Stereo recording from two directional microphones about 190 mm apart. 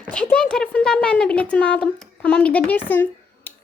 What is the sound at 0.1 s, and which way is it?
Speech, 5° left (ahead or behind).